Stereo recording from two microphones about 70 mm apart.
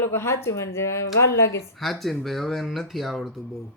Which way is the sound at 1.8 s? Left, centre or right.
Centre.